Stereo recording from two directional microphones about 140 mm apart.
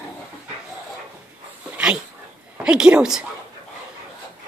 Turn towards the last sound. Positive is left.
turn(degrees=-5)  # may be behind; listen again after turning